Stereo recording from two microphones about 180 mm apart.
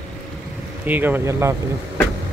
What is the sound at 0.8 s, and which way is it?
Speech, 10° right (ahead or behind).